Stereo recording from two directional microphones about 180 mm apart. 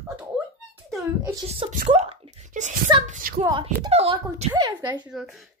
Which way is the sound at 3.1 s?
50° right (ahead or behind).